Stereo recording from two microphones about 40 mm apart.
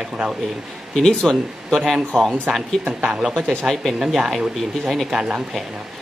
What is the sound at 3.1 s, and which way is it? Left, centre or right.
Speech, centre.